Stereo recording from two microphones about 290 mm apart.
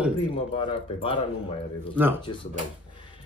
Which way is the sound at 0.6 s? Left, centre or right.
Centre.